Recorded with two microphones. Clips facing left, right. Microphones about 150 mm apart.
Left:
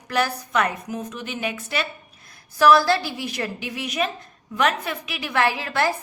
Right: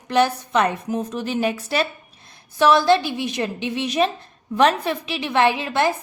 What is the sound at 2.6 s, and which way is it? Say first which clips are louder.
A woman's voice: right 1 dB; 20° right (ahead or behind).